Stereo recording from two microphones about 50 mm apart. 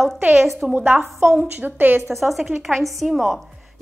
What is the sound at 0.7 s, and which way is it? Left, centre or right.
A woman's voice, right.